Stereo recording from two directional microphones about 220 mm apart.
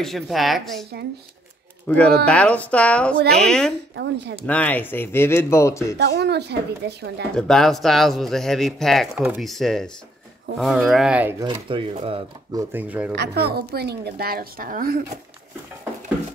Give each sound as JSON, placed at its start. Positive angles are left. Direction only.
{"t": 0.0, "sound": "a man's voice", "side_deg": 0}
{"t": 1.9, "sound": "a man's voice", "side_deg": 5}
{"t": 3.9, "sound": "a woman's voice", "side_deg": -50}
{"t": 4.5, "sound": "speech", "side_deg": 5}
{"t": 5.9, "sound": "a woman's voice", "side_deg": -50}
{"t": 7.3, "sound": "a man's voice", "side_deg": 5}
{"t": 11.4, "sound": "speech", "side_deg": -25}
{"t": 12.7, "sound": "speech", "side_deg": -5}
{"t": 13.1, "sound": "a woman's voice", "side_deg": -50}